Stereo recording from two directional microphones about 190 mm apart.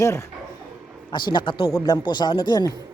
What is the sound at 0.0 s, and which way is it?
Speech, 15° left (ahead or behind).